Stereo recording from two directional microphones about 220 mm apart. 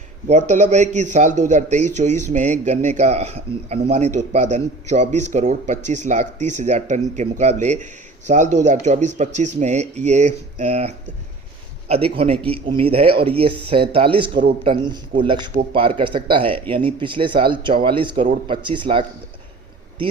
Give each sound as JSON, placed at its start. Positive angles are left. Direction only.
{"t": 0.3, "sound": "a man's voice", "side_deg": -30}